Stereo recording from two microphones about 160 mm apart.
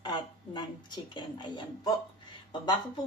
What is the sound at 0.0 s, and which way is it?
A woman's voice, 25° left (ahead or behind).